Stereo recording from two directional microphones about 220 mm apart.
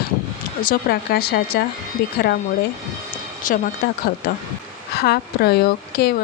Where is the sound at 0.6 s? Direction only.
45° left (ahead or behind).